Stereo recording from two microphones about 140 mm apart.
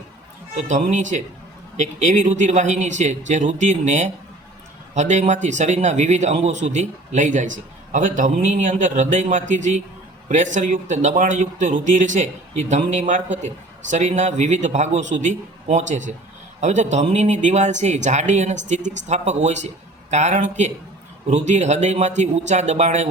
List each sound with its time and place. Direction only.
0.7 s speech: 60° right (ahead or behind)